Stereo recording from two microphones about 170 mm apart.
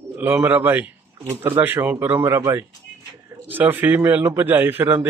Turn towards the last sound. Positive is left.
turn(degrees=-10)  # may be behind; listen again after turning